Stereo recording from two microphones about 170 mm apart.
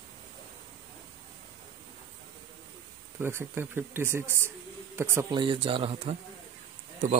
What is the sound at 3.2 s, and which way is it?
Speech, 15° right (ahead or behind).